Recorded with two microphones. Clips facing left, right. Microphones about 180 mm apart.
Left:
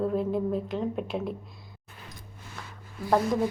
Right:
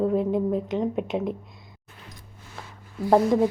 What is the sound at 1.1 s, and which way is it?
Speech, 10° right (ahead or behind).